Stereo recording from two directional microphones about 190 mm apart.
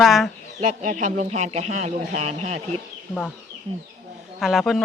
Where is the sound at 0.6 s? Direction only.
40° right (ahead or behind).